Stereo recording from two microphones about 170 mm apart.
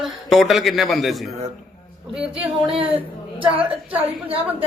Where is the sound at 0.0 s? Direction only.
Centre (ahead or behind).